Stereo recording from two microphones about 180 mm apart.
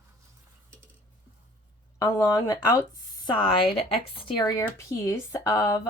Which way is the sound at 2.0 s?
20° left (ahead or behind).